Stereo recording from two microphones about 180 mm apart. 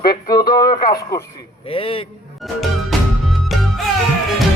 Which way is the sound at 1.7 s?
30° left (ahead or behind).